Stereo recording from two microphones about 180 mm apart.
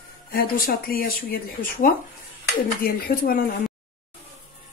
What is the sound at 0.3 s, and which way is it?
Speech, 55° left (ahead or behind).